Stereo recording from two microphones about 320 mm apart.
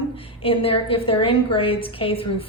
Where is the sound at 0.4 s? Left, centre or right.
Centre.